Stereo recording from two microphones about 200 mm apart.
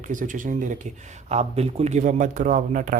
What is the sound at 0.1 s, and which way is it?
Speech, 40° right (ahead or behind).